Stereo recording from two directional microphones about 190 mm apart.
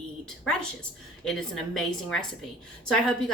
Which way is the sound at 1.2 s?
5° left (ahead or behind).